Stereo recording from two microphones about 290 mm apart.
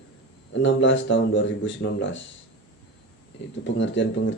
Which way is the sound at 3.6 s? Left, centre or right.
Left.